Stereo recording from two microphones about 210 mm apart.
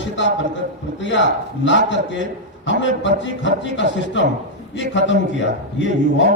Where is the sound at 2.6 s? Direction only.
60° left (ahead or behind).